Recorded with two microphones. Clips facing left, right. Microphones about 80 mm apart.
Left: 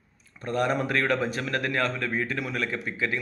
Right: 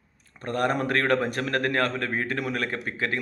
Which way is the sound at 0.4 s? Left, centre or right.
Right.